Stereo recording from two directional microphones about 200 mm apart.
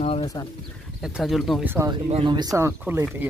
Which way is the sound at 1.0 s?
Centre (ahead or behind).